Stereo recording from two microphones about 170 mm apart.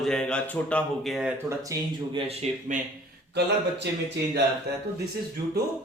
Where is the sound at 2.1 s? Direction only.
40° right (ahead or behind).